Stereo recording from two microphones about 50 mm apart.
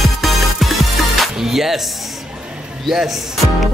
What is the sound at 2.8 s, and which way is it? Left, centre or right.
Speech, centre.